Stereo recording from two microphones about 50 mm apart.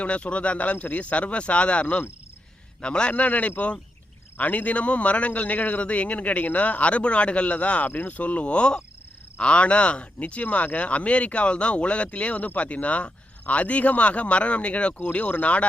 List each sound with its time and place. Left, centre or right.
0.0 s a man's voice: left
7.9 s a man's voice: left